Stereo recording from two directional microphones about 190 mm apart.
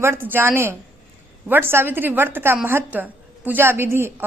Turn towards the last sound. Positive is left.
turn(degrees=-10)  # may be behind; listen again after turning